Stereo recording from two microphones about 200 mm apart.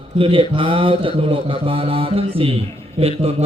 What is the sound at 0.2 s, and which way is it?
A man's voice, 25° right (ahead or behind).